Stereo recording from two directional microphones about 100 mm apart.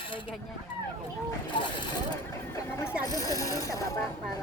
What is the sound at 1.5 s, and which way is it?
Speech, 50° left (ahead or behind).